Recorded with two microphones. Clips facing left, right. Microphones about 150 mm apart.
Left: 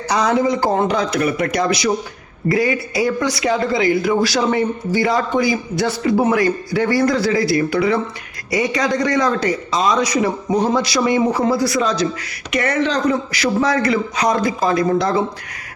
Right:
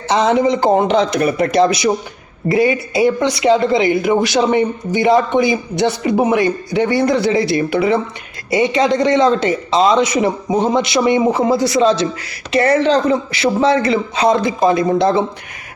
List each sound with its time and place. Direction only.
0.1 s speech: 25° right (ahead or behind)